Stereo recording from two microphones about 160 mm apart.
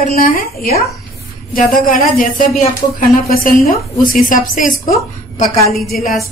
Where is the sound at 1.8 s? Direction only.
55° left (ahead or behind).